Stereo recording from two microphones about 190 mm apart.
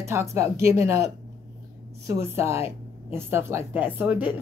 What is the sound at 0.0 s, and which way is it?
A woman's voice, 15° right (ahead or behind).